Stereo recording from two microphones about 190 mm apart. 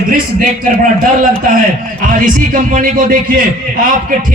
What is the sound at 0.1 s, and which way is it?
Speech, 45° right (ahead or behind).